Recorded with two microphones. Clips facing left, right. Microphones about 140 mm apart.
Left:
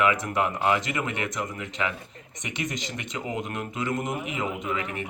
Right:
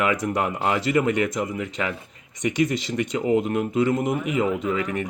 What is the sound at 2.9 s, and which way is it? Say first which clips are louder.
Speech: right 14 dB; 35° right (ahead or behind).